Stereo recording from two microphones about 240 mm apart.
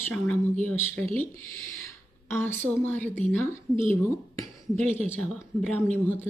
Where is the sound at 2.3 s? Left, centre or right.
Centre.